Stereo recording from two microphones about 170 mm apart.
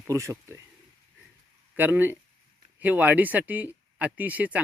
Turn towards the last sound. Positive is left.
turn(degrees=-10)  # may be behind; listen again after turning